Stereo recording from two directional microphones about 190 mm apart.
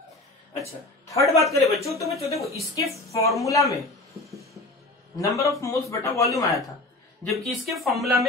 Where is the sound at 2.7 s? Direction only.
15° left (ahead or behind).